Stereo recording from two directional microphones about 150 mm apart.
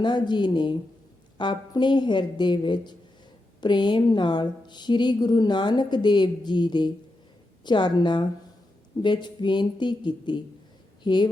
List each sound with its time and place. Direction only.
0.0 s a woman's voice: 30° left (ahead or behind)